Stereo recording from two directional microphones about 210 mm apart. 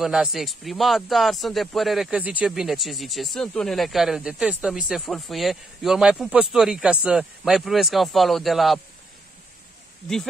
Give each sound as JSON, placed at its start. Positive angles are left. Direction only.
{"t": 0.0, "sound": "speech", "side_deg": -5}